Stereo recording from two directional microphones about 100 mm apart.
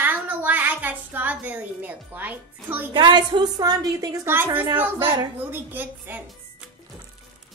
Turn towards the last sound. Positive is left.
turn(degrees=-20)  # may be behind; listen again after turning